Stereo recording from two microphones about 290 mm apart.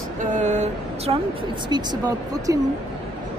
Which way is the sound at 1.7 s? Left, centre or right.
Centre.